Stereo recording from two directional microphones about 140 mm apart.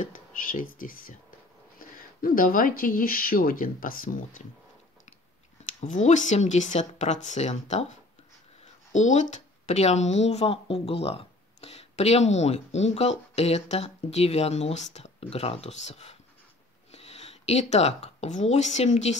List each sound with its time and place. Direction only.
0.0 s speech: 70° left (ahead or behind)
5.8 s speech: 60° left (ahead or behind)
8.9 s speech: 55° left (ahead or behind)